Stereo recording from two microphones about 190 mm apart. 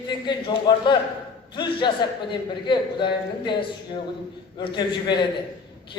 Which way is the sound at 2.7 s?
25° left (ahead or behind).